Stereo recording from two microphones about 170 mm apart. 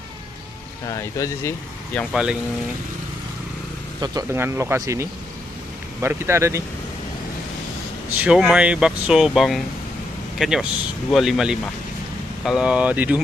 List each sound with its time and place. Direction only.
0.8 s speech: 20° left (ahead or behind)
1.9 s speech: 5° left (ahead or behind)
4.0 s speech: 20° right (ahead or behind)
8.2 s speech: 5° right (ahead or behind)